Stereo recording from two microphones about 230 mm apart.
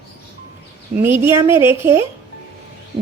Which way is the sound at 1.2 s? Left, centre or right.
Centre.